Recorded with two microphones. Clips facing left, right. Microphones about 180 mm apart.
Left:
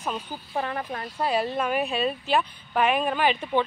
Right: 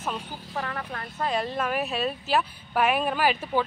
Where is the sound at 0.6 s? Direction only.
25° left (ahead or behind).